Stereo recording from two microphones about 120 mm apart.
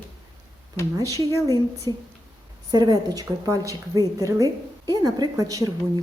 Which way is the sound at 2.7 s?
35° right (ahead or behind).